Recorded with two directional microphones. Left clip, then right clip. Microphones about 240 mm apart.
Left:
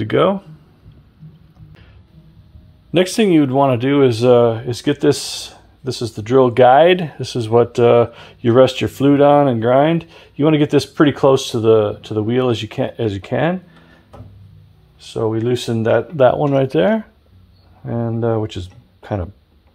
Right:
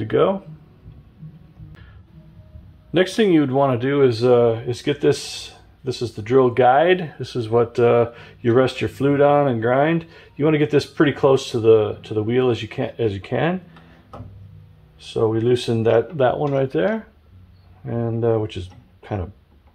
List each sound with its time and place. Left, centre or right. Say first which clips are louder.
0.0 s speech: left 3 dB; left
2.9 s speech: left 3 dB; left
15.0 s speech: even; left